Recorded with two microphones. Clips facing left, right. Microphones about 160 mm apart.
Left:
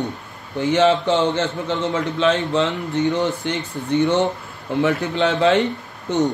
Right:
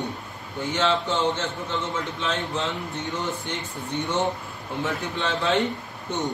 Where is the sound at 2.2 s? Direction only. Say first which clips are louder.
Left 11 dB; 80° left.